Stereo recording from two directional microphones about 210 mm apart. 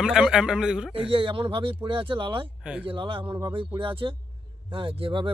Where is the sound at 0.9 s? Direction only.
25° right (ahead or behind).